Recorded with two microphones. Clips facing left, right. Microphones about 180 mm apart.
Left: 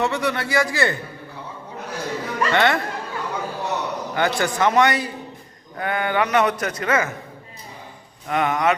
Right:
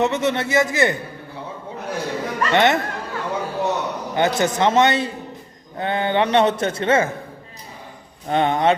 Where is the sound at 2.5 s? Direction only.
20° right (ahead or behind).